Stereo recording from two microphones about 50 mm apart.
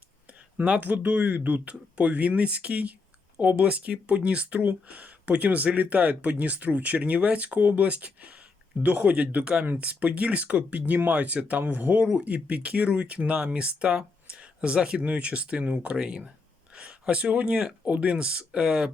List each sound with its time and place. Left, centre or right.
0.5 s speech: right